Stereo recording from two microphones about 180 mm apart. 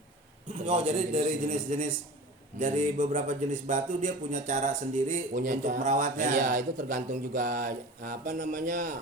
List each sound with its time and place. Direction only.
0.7 s a man's voice: 40° right (ahead or behind)